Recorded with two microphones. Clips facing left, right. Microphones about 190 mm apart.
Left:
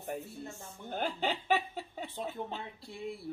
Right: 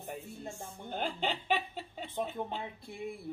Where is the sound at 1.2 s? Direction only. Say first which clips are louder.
Left 3 dB; 5° left (ahead or behind).